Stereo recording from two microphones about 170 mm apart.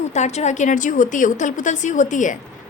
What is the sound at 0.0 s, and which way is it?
A woman's voice, 40° left (ahead or behind).